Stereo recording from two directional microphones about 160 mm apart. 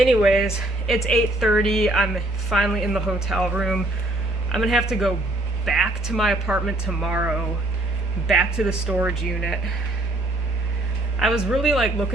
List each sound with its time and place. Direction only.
0.0 s a woman's voice: 5° right (ahead or behind)
11.2 s a woman's voice: centre (ahead or behind)